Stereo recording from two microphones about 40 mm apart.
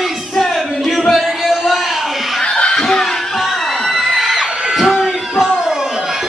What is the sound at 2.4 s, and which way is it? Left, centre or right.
Chuckle, left.